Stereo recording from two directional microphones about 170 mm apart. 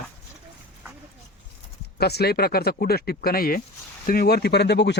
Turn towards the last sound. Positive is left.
turn(degrees=80)